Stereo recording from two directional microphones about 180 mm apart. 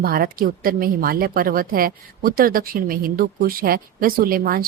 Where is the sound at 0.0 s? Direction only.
55° right (ahead or behind).